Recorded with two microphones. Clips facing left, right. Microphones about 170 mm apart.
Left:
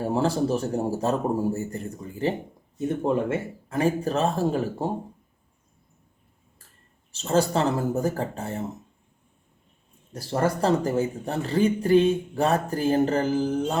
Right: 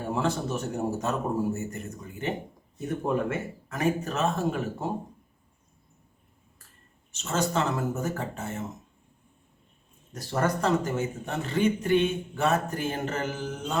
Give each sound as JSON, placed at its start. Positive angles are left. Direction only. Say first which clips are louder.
{"t": 0.0, "sound": "speech", "louder": "left 5 dB", "side_deg": 35}
{"t": 7.1, "sound": "speech", "louder": "left 6 dB", "side_deg": 35}
{"t": 10.1, "sound": "speech", "louder": "left 3 dB", "side_deg": 30}